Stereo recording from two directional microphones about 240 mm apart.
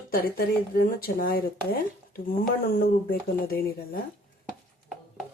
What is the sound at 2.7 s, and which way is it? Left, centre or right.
Speech, left.